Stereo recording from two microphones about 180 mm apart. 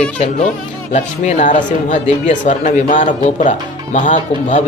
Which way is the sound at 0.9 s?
40° left (ahead or behind).